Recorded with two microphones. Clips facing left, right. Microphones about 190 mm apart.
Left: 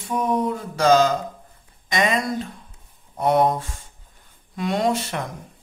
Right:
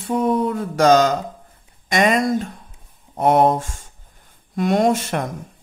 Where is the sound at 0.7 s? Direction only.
55° right (ahead or behind).